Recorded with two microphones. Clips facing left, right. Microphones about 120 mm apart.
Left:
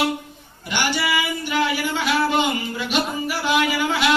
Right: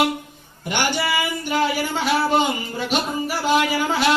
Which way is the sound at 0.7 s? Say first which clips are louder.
Right 1 dB; 45° right (ahead or behind).